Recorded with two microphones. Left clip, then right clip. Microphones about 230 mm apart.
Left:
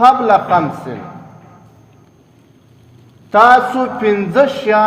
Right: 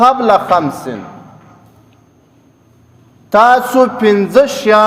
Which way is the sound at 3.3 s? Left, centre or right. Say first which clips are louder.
Right 1 dB; right.